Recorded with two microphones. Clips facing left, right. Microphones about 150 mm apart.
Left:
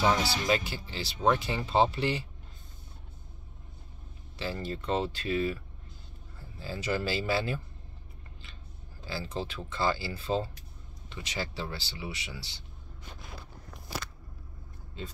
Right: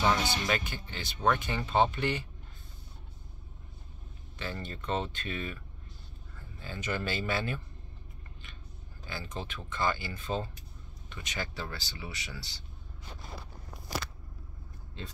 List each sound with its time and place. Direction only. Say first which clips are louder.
0.5 s speech: left 4 dB; 30° left (ahead or behind)
4.4 s speech: left 4 dB; 30° left (ahead or behind)
6.6 s speech: left 3 dB; 30° left (ahead or behind)
9.0 s speech: left 4 dB; 30° left (ahead or behind)